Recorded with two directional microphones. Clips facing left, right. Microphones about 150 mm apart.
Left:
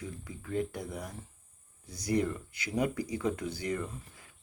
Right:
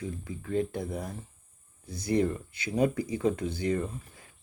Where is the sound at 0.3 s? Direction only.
25° right (ahead or behind).